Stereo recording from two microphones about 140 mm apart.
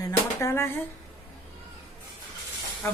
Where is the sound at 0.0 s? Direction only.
20° left (ahead or behind).